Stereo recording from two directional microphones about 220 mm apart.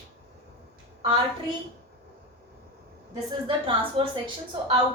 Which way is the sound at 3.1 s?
25° right (ahead or behind).